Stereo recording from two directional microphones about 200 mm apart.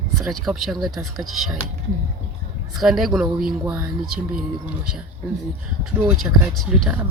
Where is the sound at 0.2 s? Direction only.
Centre (ahead or behind).